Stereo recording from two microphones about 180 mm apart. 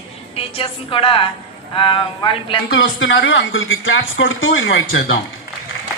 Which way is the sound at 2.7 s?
90° left.